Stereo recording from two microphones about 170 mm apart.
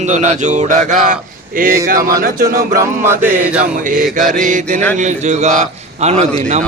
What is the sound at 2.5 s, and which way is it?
Mantra, 20° right (ahead or behind).